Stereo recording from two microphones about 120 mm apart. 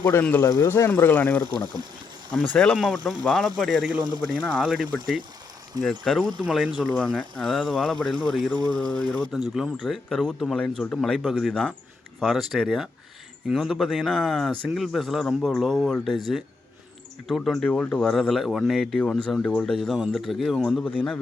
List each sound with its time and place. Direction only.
0.0 s speech: 20° left (ahead or behind); by 4.0 s centre (ahead or behind)
4.0 s speech: 35° right (ahead or behind)
4.5 s speech: 5° right (ahead or behind)
8.5 s speech: 35° right (ahead or behind)
8.9 s speech: 10° left (ahead or behind)
9.3 s speech: 5° right (ahead or behind)